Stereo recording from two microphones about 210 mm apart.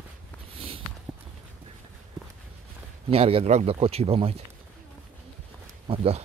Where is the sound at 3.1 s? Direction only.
25° right (ahead or behind).